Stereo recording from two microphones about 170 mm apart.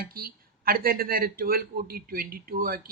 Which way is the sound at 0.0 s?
60° right (ahead or behind).